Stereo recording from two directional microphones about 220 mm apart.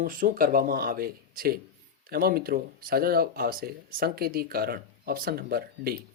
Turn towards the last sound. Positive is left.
turn(degrees=-45)  # may be behind; listen again after turning